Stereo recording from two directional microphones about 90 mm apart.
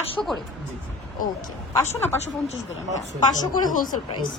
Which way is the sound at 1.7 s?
30° left (ahead or behind).